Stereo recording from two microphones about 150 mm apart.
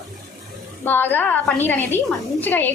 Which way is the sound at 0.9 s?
15° left (ahead or behind).